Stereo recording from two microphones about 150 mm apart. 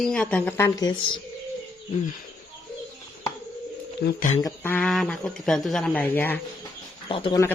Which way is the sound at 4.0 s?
65° left (ahead or behind).